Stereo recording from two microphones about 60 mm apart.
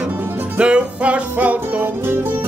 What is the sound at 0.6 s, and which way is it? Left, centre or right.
Music, centre.